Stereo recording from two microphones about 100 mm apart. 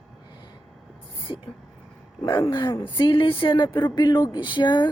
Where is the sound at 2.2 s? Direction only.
45° left (ahead or behind).